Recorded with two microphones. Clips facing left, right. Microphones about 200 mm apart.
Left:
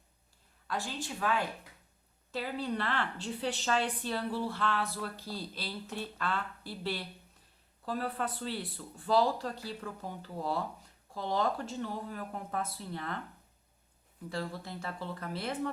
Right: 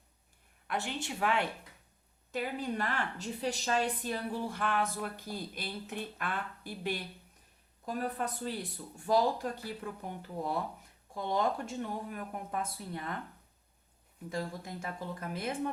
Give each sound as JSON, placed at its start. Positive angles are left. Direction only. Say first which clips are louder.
{"t": 0.7, "sound": "a woman's voice", "louder": "right 1 dB", "side_deg": -20}
{"t": 14.3, "sound": "a woman's voice", "louder": "even", "side_deg": -15}